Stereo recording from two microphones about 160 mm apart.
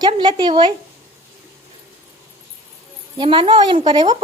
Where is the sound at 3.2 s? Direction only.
30° right (ahead or behind).